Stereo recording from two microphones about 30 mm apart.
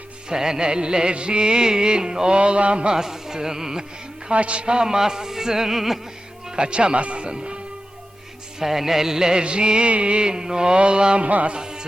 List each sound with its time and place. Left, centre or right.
0.3 s music: centre; by 2.9 s right
2.9 s music: centre
4.3 s music: right; by 6.0 s centre
6.6 s music: right
8.5 s a sound: centre
9.4 s music: right
10.2 s music: right
11.2 s music: right
11.4 s speech: right